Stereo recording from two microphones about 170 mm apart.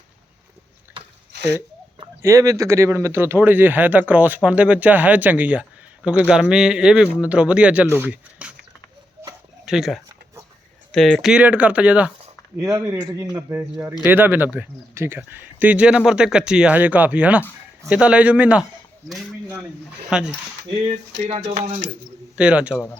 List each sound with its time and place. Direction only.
1.3 s a sound: 85° right
2.2 s speech: 20° right (ahead or behind)
9.6 s speech: centre (ahead or behind)
12.5 s speech: 20° right (ahead or behind)
20.1 s speech: 5° right (ahead or behind)
21.2 s a sound: 40° right (ahead or behind)
21.6 s speech: 80° right
22.4 s speech: 5° right (ahead or behind)